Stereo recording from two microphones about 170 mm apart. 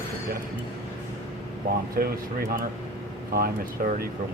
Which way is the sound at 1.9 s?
60° right (ahead or behind).